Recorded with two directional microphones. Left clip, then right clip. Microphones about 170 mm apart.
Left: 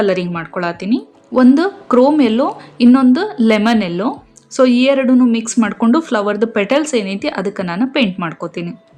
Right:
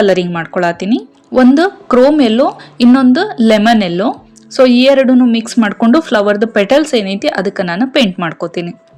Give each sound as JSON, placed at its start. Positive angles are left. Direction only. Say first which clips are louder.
{"t": 0.0, "sound": "a woman's voice", "louder": "right 5 dB", "side_deg": -25}